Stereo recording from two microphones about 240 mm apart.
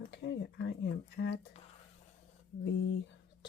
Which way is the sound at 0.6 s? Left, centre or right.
Left.